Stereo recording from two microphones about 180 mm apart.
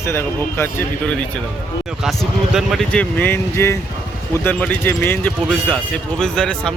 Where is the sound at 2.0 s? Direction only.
Centre (ahead or behind).